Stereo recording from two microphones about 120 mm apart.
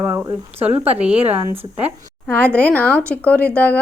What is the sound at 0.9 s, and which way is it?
Speech, 10° right (ahead or behind).